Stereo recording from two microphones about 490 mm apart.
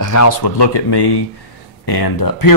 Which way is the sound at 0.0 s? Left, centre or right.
Left.